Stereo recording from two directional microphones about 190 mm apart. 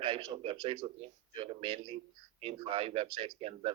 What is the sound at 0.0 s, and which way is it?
Speech, 30° right (ahead or behind).